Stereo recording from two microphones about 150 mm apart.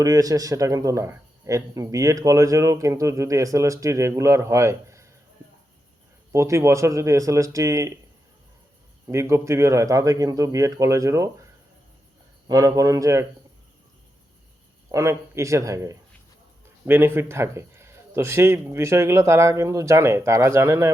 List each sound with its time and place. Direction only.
0.0 s speech: 25° right (ahead or behind)
6.3 s speech: 20° right (ahead or behind)
9.0 s speech: 20° right (ahead or behind)
12.5 s speech: 20° right (ahead or behind)
14.9 s a man's voice: 20° right (ahead or behind)